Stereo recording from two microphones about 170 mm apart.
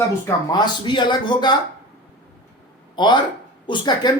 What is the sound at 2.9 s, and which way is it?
Speech, 25° left (ahead or behind).